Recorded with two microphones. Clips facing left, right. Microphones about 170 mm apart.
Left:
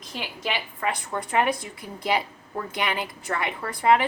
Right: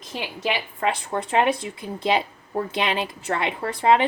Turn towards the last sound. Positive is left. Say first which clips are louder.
# right 2 dB
turn(degrees=-25)  # may be behind; listen again after turning